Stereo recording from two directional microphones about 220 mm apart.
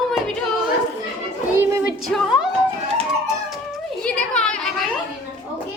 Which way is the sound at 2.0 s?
Centre (ahead or behind).